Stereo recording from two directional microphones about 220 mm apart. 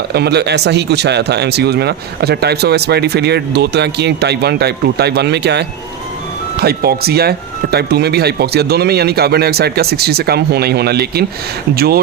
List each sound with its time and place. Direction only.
0.1 s speech: 50° right (ahead or behind)